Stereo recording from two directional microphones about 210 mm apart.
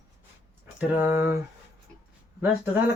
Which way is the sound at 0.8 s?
10° right (ahead or behind).